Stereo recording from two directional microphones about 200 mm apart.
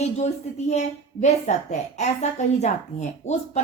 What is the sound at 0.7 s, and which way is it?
Speech, 35° left (ahead or behind).